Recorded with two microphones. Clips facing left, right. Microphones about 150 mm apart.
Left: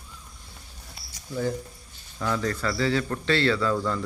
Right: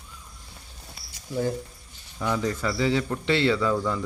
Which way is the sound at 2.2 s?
15° right (ahead or behind).